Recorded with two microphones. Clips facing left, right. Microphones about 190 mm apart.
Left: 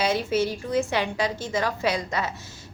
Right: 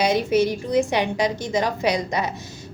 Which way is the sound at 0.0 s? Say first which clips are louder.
Right 4 dB; 15° right (ahead or behind).